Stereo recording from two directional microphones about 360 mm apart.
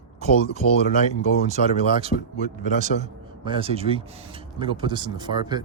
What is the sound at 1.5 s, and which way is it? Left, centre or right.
A man's voice, centre.